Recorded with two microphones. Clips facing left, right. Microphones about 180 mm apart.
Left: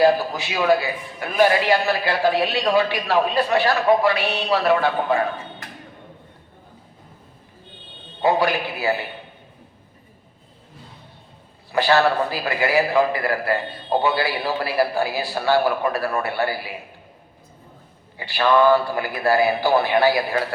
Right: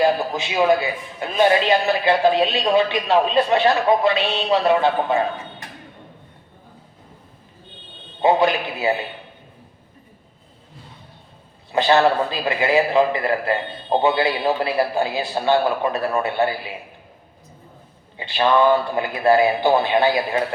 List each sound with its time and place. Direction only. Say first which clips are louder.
0.0 s a man's voice: left 2 dB; 20° right (ahead or behind)
8.2 s a man's voice: right 2 dB; 20° right (ahead or behind)
11.7 s a man's voice: right 2 dB; 20° right (ahead or behind)
18.2 s a man's voice: even; 20° right (ahead or behind)